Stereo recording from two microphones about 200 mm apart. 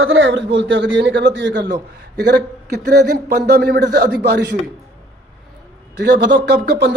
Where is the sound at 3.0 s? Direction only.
55° right (ahead or behind).